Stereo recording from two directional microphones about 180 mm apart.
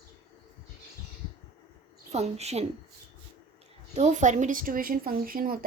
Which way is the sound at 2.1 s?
35° right (ahead or behind).